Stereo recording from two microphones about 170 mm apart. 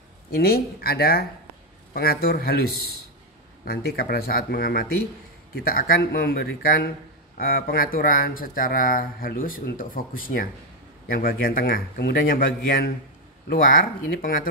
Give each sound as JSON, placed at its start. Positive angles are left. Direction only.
{"t": 0.3, "sound": "speech", "side_deg": 65}